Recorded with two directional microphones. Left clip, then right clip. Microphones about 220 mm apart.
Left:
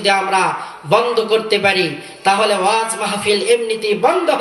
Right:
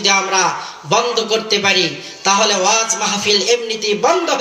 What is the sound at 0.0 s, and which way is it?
A man's voice, 10° right (ahead or behind).